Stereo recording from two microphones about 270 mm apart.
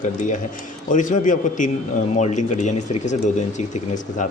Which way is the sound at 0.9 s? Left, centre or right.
Left.